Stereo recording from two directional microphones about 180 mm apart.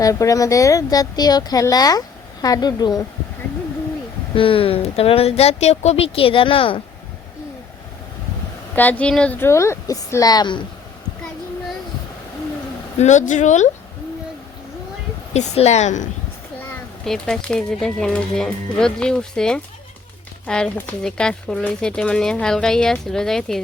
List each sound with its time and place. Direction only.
0.0 s speech: 20° left (ahead or behind)
4.4 s speech: 30° left (ahead or behind)
8.7 s speech: 10° left (ahead or behind)
13.0 s speech: 40° left (ahead or behind)
15.3 s speech: 40° left (ahead or behind)
17.1 s speech: 5° left (ahead or behind)